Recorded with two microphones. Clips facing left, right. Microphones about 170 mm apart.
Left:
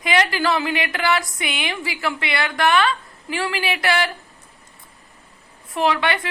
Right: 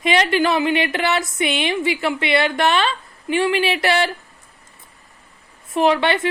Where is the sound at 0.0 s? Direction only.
25° right (ahead or behind).